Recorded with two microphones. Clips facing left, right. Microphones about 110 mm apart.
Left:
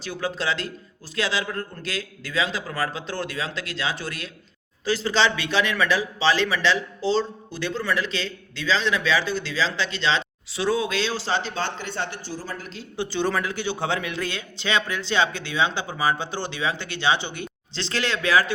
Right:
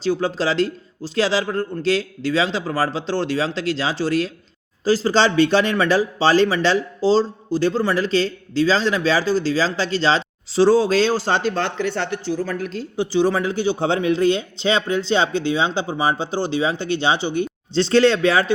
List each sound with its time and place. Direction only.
0.0 s a man's voice: 30° right (ahead or behind); by 12.8 s 55° right (ahead or behind)
13.0 s speech: 15° right (ahead or behind)